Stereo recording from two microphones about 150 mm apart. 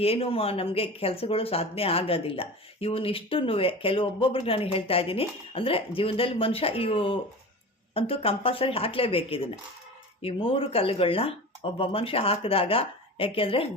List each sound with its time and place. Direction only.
0.0 s speech: 40° left (ahead or behind)